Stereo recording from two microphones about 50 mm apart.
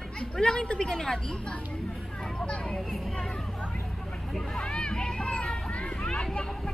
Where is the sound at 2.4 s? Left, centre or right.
Centre.